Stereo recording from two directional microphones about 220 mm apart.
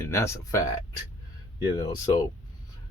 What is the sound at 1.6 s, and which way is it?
Speech, 15° left (ahead or behind).